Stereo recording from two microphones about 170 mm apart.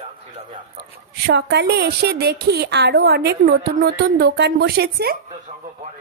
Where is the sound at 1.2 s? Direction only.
75° right (ahead or behind).